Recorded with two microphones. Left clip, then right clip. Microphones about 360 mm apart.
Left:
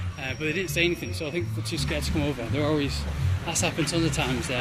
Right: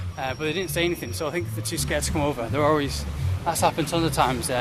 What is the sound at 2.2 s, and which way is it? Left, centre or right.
Speech, right.